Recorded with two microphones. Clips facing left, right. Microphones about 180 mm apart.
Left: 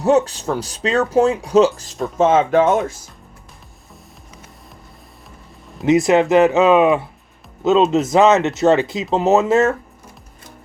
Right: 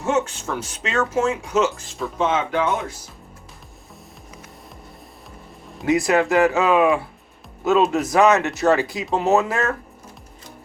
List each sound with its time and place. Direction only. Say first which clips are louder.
0.0 s speech: left 7 dB; 35° left (ahead or behind)
5.8 s speech: left 5 dB; 20° left (ahead or behind)